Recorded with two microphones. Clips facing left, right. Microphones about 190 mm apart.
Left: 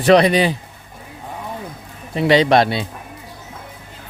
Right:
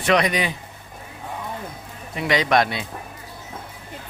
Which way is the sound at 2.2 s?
30° left (ahead or behind).